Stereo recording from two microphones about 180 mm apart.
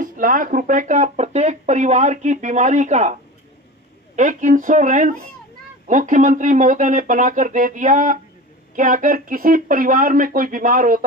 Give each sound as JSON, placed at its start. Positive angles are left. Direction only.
{"t": 0.0, "sound": "speech", "side_deg": -50}